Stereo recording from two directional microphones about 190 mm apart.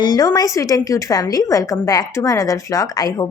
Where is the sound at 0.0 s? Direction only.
20° left (ahead or behind).